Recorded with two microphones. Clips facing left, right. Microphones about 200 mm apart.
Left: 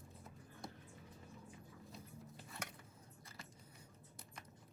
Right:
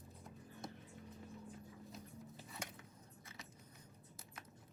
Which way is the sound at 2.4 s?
5° right (ahead or behind).